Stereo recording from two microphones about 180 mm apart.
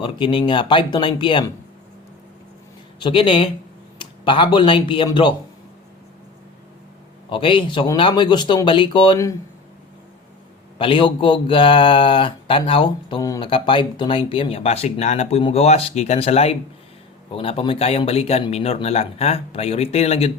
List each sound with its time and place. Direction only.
0.0 s speech: 25° left (ahead or behind)
3.0 s speech: 30° left (ahead or behind)
7.3 s speech: 30° left (ahead or behind)
10.8 s speech: 30° left (ahead or behind)